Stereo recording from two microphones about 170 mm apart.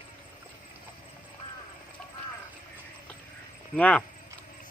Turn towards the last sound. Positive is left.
turn(degrees=5)  # may be behind; listen again after turning